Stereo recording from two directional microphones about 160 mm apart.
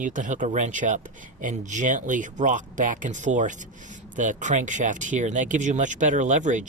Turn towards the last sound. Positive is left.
turn(degrees=-50)  # may be behind; listen again after turning